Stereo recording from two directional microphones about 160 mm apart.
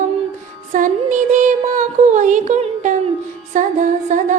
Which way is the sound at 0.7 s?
50° right (ahead or behind).